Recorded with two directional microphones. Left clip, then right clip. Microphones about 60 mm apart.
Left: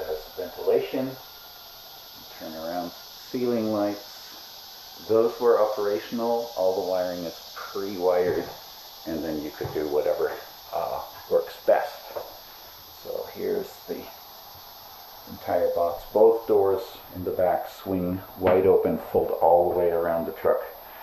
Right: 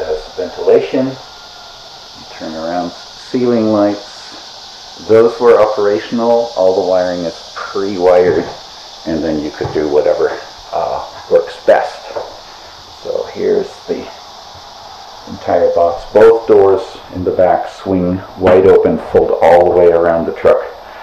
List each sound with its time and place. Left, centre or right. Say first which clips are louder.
0.0 s a sound: right 13 dB; centre
2.4 s speech: right 13 dB; centre
5.1 s speech: right 13 dB; centre
9.0 s speech: right 14 dB; centre
11.6 s speech: right 12 dB; centre
13.1 s a sound: right 14 dB; centre
15.4 s speech: right 13 dB; centre
19.8 s speech: right 15 dB; centre